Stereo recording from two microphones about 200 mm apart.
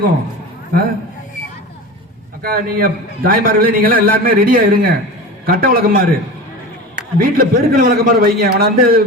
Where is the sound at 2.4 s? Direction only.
45° right (ahead or behind).